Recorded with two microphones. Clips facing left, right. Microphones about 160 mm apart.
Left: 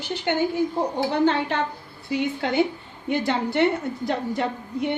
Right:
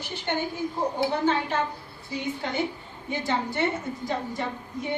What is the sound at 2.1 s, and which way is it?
Speech, 90° left.